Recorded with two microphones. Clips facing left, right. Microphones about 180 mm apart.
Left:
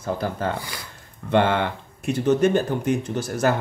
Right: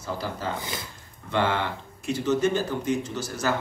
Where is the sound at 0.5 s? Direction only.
20° right (ahead or behind).